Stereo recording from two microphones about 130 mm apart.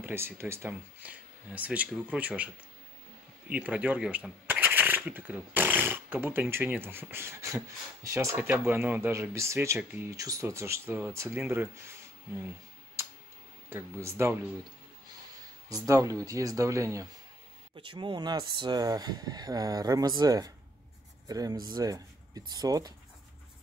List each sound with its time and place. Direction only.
0.0 s speech: 20° right (ahead or behind)
10.1 s speech: 25° right (ahead or behind)
13.7 s speech: 20° right (ahead or behind)
15.7 s speech: 25° right (ahead or behind)
17.8 s speech: 40° right (ahead or behind)